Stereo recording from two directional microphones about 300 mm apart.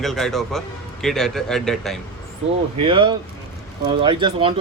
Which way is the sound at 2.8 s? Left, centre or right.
Centre.